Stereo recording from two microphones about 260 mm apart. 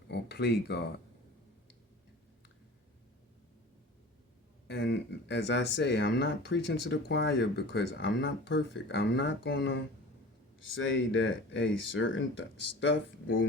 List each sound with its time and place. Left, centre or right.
0.1 s speech: left
4.7 s speech: left